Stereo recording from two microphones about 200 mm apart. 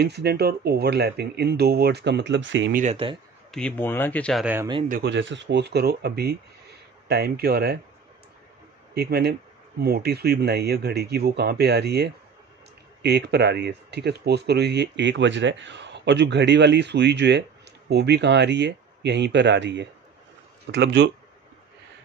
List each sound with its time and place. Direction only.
0.0 s speech: 55° right (ahead or behind)
2.7 s speech: 35° right (ahead or behind)
3.5 s speech: 5° left (ahead or behind)
4.8 s speech: 45° right (ahead or behind)
5.1 s speech: 65° right (ahead or behind)
8.9 s speech: 55° right (ahead or behind)